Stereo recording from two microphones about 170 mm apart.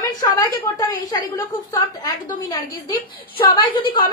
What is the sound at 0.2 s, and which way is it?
Speech, 20° left (ahead or behind).